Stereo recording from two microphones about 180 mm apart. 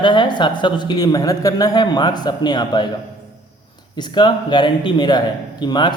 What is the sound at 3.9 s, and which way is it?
Speech, 25° left (ahead or behind).